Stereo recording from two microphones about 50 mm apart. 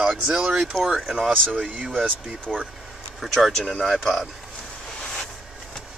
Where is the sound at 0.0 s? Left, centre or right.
Centre.